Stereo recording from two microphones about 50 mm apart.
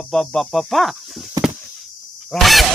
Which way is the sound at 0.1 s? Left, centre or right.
Centre.